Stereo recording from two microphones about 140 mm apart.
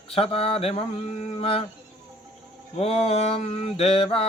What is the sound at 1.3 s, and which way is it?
Speech, 40° left (ahead or behind).